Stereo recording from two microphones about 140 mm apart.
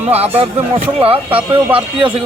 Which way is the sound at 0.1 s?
45° right (ahead or behind).